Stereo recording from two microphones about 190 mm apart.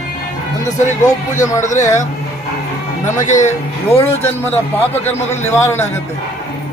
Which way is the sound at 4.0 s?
10° left (ahead or behind).